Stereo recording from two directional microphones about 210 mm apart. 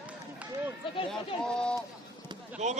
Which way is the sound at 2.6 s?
35° right (ahead or behind).